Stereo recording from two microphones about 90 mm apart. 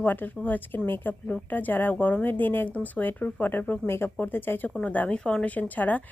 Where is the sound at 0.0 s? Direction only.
20° left (ahead or behind).